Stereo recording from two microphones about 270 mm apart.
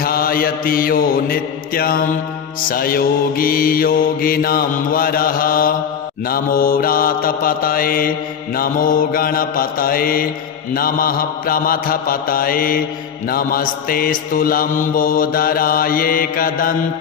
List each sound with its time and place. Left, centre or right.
0.0 s mantra: left